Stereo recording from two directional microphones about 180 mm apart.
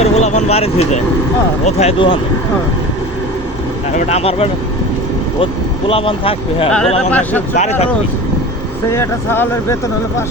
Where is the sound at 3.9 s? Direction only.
35° left (ahead or behind).